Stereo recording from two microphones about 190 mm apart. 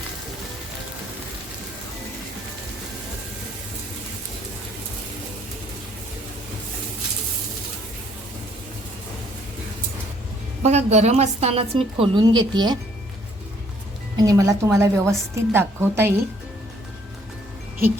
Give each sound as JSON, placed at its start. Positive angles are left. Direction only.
{"t": 10.6, "sound": "a woman's voice", "side_deg": -35}
{"t": 14.2, "sound": "a woman's voice", "side_deg": -15}